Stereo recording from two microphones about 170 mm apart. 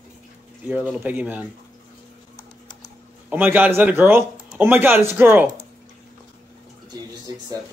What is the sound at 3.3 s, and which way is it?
Speech, 10° right (ahead or behind).